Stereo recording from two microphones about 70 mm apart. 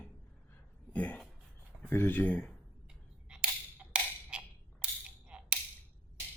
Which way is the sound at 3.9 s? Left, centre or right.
Centre.